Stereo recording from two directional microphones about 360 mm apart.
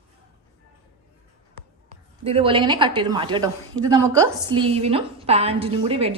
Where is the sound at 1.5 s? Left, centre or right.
Centre.